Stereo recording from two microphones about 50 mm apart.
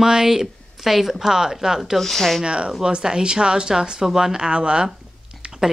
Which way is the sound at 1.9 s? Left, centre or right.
Centre.